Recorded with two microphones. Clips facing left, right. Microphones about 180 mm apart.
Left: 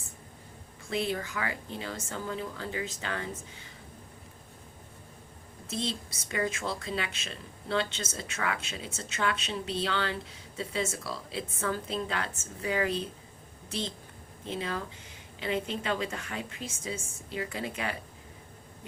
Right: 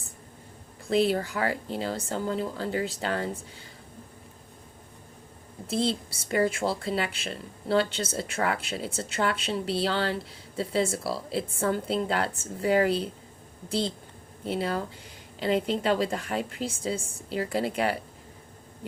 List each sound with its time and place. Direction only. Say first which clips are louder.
0.9 s a woman's voice: right 8 dB; 35° right (ahead or behind)
5.6 s a woman's voice: right 7 dB; 35° right (ahead or behind)